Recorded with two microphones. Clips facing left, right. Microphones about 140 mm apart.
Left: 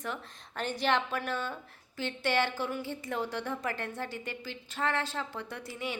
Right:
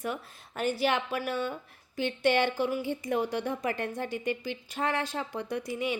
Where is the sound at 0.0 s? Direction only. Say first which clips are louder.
Right 4 dB; 10° right (ahead or behind).